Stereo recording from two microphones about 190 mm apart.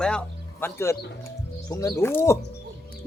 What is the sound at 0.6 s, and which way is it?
Speech, 15° left (ahead or behind).